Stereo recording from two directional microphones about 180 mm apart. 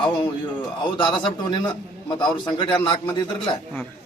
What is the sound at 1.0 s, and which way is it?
A man's voice, 25° left (ahead or behind).